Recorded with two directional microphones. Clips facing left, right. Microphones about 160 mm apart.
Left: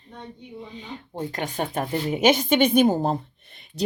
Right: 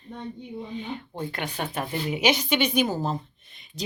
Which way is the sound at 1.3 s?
45° left (ahead or behind).